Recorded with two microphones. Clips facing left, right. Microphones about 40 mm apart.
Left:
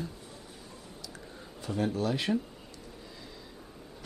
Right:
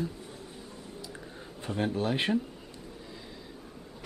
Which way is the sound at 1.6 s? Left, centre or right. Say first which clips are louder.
Even; right.